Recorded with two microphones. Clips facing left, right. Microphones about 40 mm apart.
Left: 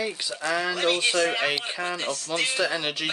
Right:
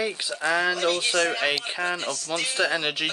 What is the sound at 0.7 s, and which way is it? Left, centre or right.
Speech, centre.